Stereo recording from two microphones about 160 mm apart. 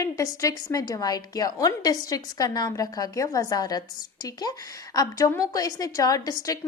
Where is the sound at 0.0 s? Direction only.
20° left (ahead or behind).